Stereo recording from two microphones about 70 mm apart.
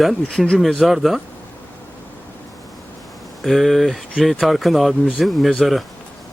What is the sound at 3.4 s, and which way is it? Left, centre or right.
Speech, centre.